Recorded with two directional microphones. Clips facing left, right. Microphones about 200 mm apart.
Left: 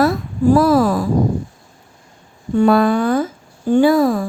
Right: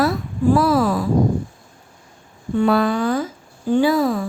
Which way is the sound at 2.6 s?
50° left (ahead or behind).